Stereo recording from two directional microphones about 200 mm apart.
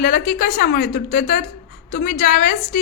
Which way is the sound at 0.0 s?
45° left (ahead or behind).